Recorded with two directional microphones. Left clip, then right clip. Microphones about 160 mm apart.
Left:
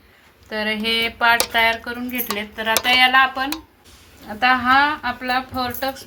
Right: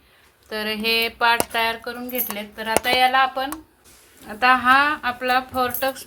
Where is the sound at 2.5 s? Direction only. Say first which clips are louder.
Left 3 dB; 20° right (ahead or behind).